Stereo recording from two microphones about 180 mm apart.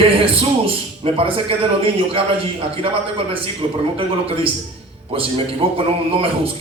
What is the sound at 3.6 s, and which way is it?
A man's voice, 30° right (ahead or behind).